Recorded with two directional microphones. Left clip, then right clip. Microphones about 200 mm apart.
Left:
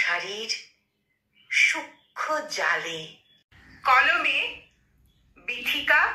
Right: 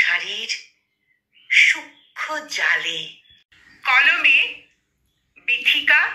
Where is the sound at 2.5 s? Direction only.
15° right (ahead or behind).